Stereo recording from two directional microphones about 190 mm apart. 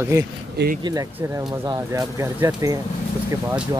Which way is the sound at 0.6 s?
60° right (ahead or behind).